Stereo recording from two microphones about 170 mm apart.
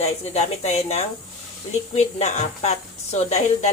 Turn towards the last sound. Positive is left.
turn(degrees=40)  # may be behind; listen again after turning